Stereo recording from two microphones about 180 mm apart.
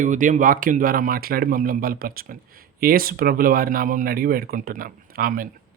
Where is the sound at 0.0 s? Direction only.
45° right (ahead or behind).